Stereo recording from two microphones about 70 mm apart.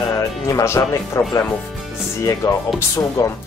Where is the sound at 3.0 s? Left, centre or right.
Left.